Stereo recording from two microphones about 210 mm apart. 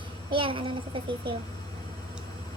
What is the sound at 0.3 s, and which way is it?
Speech, 25° right (ahead or behind).